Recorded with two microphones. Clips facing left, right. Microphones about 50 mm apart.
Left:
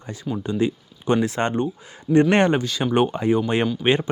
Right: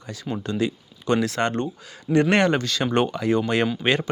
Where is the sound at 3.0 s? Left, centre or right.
Left.